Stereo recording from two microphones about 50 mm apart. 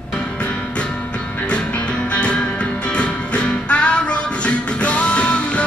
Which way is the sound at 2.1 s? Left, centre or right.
Left.